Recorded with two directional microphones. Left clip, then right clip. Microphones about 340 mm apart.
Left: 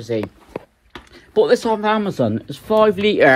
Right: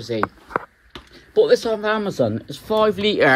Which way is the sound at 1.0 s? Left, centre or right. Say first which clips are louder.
Left 1 dB; centre.